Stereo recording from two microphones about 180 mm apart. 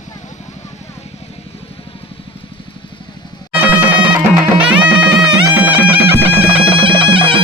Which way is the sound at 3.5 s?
10° right (ahead or behind).